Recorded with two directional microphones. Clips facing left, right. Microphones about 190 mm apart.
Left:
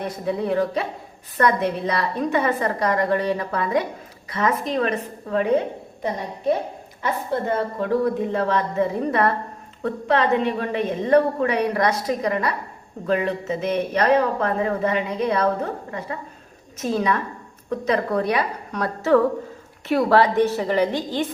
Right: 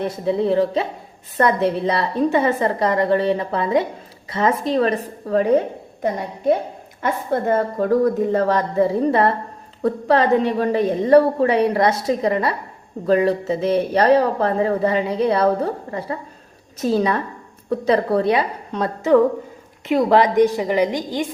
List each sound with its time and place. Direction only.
0.0 s a woman's voice: 30° right (ahead or behind)
7.0 s a woman's voice: 50° right (ahead or behind); by 21.2 s 15° right (ahead or behind)